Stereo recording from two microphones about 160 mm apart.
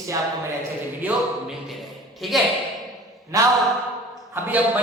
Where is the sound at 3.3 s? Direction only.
20° right (ahead or behind).